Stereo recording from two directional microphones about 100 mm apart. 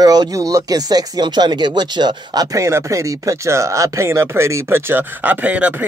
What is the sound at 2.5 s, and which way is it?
Speech, 30° right (ahead or behind).